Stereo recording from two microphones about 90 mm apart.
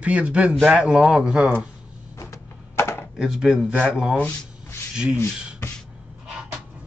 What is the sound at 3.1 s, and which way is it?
A man's voice, 5° right (ahead or behind).